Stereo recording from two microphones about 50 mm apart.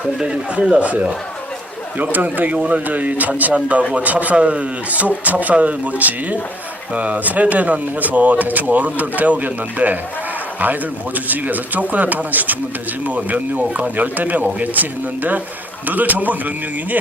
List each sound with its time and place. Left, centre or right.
0.6 s speech: right
2.1 s speech: right